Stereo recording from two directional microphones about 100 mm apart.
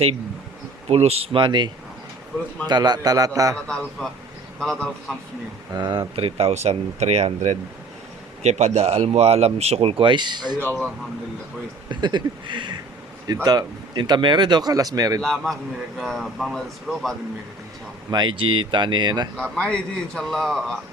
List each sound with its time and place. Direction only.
0.9 s a man's voice: 90° right; by 3.6 s 35° right (ahead or behind)
4.0 s a man's voice: 5° left (ahead or behind)
5.7 s speech: 45° right (ahead or behind)
6.1 s speech: 80° right
8.4 s speech: 90° right; by 10.6 s 45° right (ahead or behind)
10.6 s a man's voice: 15° left (ahead or behind)
11.9 s speech: 50° right (ahead or behind)
15.2 s a man's voice: 5° left (ahead or behind)
18.1 s speech: 50° right (ahead or behind)
19.4 s a man's voice: 10° left (ahead or behind)